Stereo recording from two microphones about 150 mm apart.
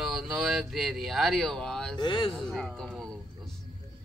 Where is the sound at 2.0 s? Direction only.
35° left (ahead or behind).